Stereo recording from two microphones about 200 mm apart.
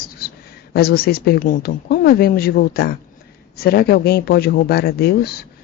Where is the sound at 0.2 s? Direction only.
50° left (ahead or behind).